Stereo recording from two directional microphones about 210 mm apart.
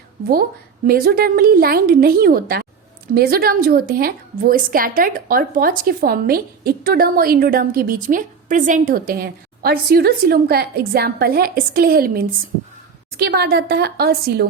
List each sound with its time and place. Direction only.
0.9 s a woman's voice: 45° right (ahead or behind)